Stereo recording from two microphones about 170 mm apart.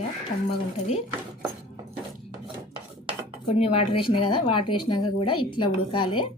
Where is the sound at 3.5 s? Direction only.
35° left (ahead or behind).